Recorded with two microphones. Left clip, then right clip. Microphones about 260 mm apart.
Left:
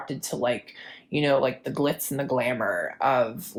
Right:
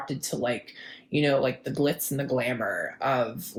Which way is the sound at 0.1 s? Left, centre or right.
Left.